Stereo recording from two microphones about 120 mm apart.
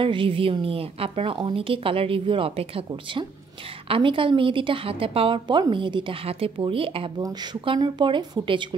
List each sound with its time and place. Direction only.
0.0 s a woman's voice: 45° right (ahead or behind)
7.2 s speech: 30° right (ahead or behind)
7.6 s a woman's voice: 45° right (ahead or behind)